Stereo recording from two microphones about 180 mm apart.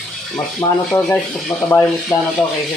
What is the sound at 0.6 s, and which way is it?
Speech, 15° left (ahead or behind).